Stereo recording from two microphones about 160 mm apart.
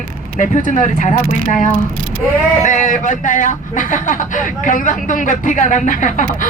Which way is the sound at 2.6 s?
55° left (ahead or behind).